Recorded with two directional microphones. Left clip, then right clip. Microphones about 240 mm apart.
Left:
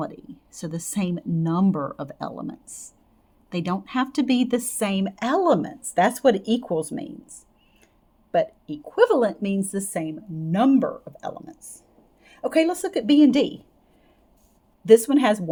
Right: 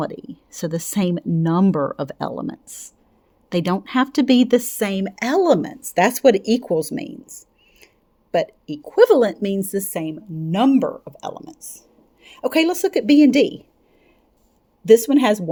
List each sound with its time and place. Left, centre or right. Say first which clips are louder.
0.0 s speech: right 5 dB; right
8.3 s speech: right 2 dB; right
14.8 s speech: right 2 dB; right